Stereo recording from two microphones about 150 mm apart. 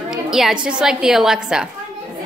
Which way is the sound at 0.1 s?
Centre (ahead or behind).